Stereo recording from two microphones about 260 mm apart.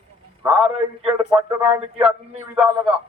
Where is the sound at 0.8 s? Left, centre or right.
Centre.